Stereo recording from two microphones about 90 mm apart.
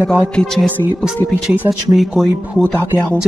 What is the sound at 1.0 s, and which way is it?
Speech, 15° right (ahead or behind).